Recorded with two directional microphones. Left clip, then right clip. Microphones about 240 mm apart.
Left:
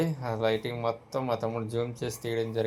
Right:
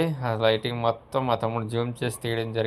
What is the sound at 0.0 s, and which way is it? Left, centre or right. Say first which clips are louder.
Speech: right 5 dB; centre.